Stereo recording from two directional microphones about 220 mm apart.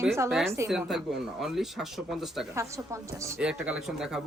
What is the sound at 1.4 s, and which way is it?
Speech, centre (ahead or behind).